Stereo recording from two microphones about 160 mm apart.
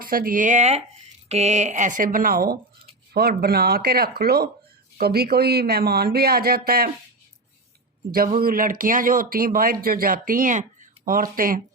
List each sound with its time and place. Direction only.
0.0 s speech: 65° right (ahead or behind)
3.1 s speech: 75° right (ahead or behind)
8.4 s speech: 65° right (ahead or behind)